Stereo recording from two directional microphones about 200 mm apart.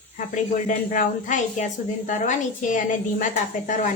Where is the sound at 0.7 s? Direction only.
40° left (ahead or behind).